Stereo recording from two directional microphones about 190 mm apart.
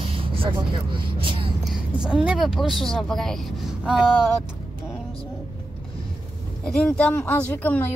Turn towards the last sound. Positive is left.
turn(degrees=10)  # may be behind; listen again after turning